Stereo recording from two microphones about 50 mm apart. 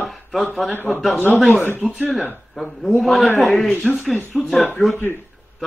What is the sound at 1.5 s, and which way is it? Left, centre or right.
Speech, left.